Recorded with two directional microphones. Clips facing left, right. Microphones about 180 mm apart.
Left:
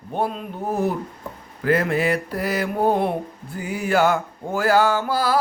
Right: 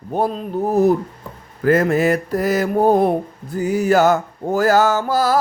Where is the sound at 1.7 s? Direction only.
45° right (ahead or behind).